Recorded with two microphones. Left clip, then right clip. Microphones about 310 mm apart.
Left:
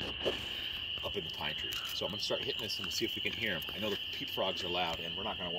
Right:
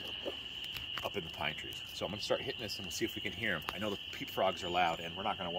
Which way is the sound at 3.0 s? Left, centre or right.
Right.